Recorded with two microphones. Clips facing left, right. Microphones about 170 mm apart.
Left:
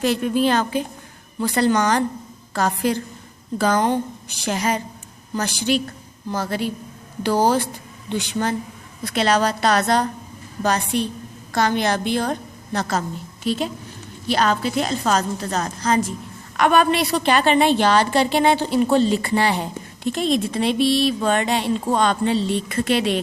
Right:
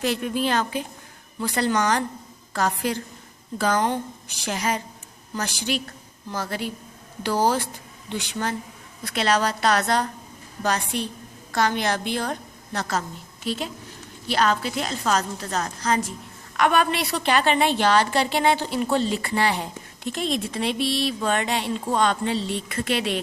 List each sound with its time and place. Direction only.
0.0 s a woman's voice: 35° left (ahead or behind)
8.2 s a woman's voice: 25° left (ahead or behind)
14.3 s a woman's voice: 25° left (ahead or behind)